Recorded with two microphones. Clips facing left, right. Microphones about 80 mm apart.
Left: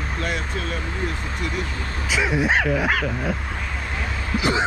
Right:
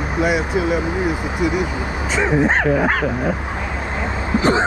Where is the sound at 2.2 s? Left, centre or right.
Right.